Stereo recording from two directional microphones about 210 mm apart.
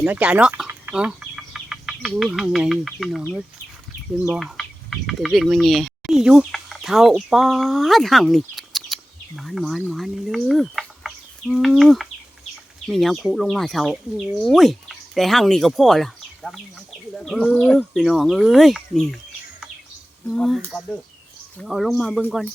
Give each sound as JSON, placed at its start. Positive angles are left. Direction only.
{"t": 0.0, "sound": "speech", "side_deg": -5}